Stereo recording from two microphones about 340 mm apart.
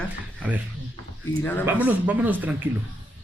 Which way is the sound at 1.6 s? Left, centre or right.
Centre.